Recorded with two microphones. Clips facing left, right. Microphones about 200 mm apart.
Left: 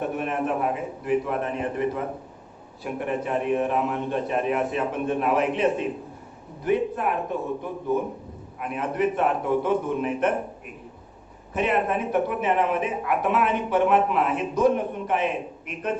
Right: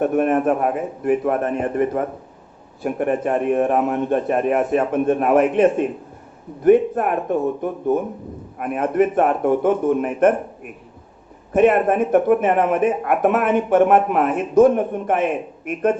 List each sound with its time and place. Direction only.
0.0 s speech: 50° right (ahead or behind)